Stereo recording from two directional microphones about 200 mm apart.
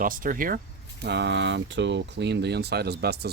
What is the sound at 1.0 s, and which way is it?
Speech, 60° right (ahead or behind).